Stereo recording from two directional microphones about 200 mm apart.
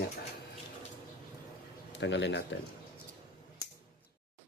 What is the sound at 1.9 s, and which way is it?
Speech, 60° left (ahead or behind).